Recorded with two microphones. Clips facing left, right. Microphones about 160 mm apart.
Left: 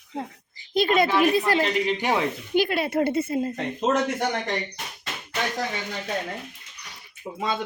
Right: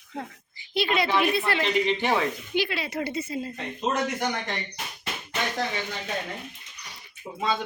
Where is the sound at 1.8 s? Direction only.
10° left (ahead or behind).